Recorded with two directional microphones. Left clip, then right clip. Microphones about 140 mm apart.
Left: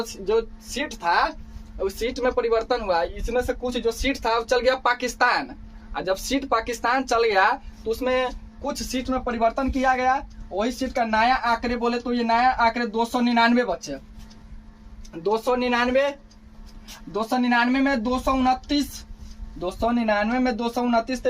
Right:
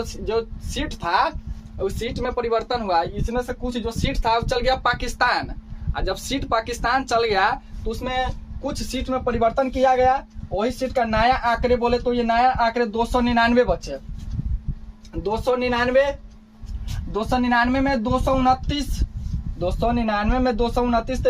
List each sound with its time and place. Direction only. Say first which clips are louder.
0.0 s speech: left 1 dB; 45° right (ahead or behind)
1.8 s speech: left 2 dB; 25° right (ahead or behind)
4.1 s speech: right 3 dB; 30° right (ahead or behind)
15.2 s speech: even; 60° right (ahead or behind)
17.2 s speech: right 2 dB; 30° right (ahead or behind)